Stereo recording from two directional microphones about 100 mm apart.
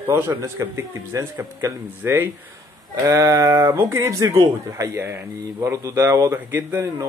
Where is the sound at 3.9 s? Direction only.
30° right (ahead or behind).